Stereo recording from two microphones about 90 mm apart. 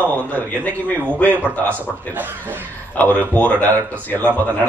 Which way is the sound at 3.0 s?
15° left (ahead or behind).